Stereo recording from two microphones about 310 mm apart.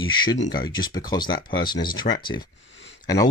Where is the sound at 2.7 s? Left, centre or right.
Left.